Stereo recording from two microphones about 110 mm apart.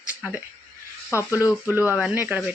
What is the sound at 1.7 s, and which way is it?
Speech, 20° right (ahead or behind).